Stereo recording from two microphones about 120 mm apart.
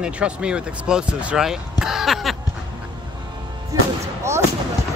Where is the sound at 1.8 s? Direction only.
5° right (ahead or behind).